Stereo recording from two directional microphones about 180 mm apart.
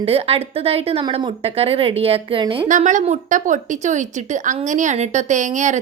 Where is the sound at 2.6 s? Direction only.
45° right (ahead or behind).